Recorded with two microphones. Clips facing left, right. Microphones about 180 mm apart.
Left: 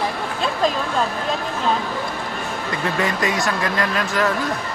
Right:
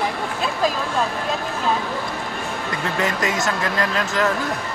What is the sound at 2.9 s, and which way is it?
Speech, 20° left (ahead or behind).